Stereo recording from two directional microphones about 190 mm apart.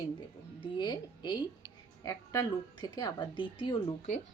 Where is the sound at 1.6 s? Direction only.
20° right (ahead or behind).